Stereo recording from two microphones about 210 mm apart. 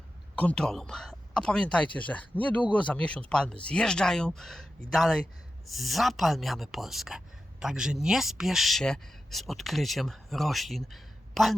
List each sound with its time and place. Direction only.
0.3 s speech: 5° left (ahead or behind)